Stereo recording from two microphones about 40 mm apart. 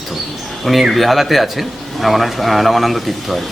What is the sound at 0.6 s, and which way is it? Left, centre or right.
A man's voice, centre.